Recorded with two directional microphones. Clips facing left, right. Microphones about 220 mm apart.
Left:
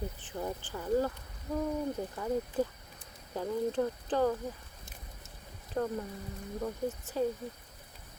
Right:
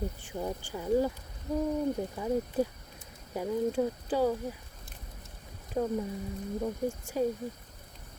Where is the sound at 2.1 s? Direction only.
10° right (ahead or behind).